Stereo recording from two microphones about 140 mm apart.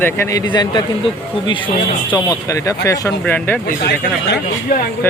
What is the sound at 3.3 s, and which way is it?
Speech, 10° left (ahead or behind).